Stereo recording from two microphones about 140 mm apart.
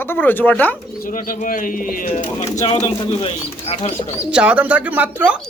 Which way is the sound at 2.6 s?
40° left (ahead or behind).